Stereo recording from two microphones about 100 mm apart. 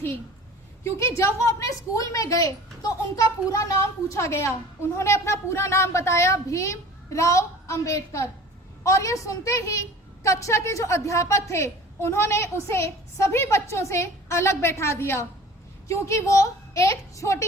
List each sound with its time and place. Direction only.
0.9 s a woman's voice: 25° left (ahead or behind)